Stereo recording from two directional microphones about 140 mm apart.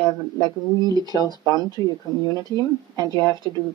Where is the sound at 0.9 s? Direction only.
30° right (ahead or behind).